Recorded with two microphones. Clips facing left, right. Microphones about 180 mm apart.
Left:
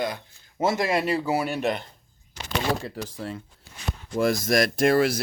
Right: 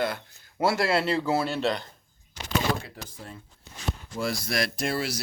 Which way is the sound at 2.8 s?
90° left.